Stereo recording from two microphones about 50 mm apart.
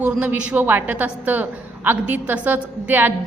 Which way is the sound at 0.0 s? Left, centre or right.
Right.